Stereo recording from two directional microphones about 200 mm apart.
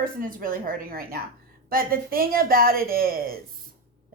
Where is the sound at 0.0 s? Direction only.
45° right (ahead or behind).